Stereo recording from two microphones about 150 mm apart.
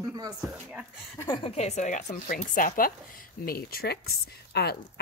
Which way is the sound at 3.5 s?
90° left.